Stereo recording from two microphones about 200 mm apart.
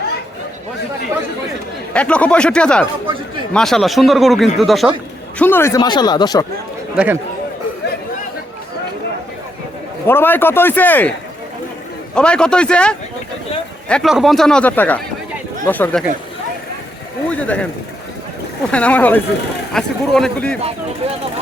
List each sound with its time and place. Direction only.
1.9 s speech: 5° left (ahead or behind)
5.4 s speech: 10° left (ahead or behind)
6.9 s a man's voice: 5° right (ahead or behind)
10.1 s speech: 10° left (ahead or behind)
12.1 s speech: 5° left (ahead or behind)
17.2 s speech: 5° left (ahead or behind)
18.7 s speech: 5° left (ahead or behind)